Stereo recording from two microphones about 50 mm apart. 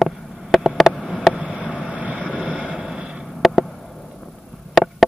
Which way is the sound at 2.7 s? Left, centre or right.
Centre.